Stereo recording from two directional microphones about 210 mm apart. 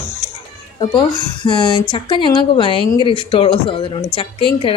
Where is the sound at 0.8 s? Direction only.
25° left (ahead or behind).